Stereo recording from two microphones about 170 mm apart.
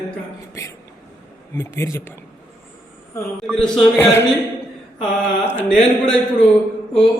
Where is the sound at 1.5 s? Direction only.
15° left (ahead or behind).